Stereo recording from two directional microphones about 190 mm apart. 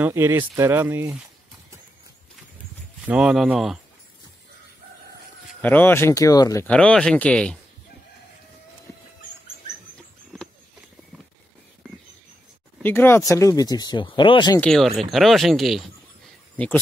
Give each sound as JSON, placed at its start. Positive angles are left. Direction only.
{"t": 0.0, "sound": "speech", "side_deg": -10}
{"t": 3.1, "sound": "speech", "side_deg": -5}
{"t": 5.6, "sound": "speech", "side_deg": 10}
{"t": 6.7, "sound": "speech", "side_deg": 5}
{"t": 12.8, "sound": "speech", "side_deg": 10}
{"t": 14.6, "sound": "speech", "side_deg": 0}